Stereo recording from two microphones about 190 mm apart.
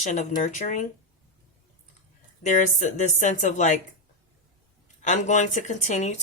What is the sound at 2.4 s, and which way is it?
Speech, 40° left (ahead or behind).